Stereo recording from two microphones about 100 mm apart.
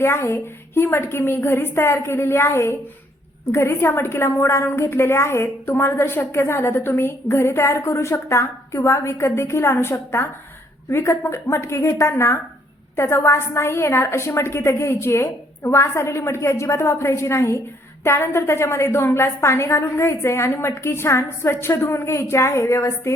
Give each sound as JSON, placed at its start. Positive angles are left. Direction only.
{"t": 0.0, "sound": "a woman's voice", "side_deg": 25}